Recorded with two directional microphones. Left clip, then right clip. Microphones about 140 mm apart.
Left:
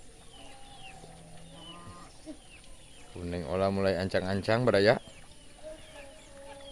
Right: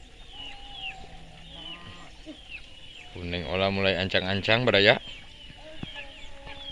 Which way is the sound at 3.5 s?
10° left (ahead or behind).